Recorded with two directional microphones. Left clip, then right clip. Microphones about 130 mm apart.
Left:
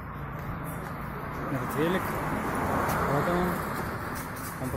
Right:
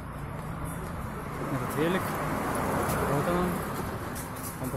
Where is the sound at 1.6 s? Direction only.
90° right.